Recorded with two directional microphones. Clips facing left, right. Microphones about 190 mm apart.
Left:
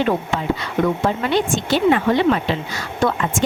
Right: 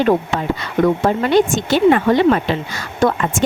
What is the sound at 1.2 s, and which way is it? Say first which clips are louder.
A woman's voice: right 7 dB; 45° right (ahead or behind).